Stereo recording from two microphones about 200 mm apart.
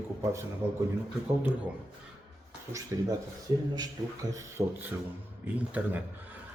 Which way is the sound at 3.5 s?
20° right (ahead or behind).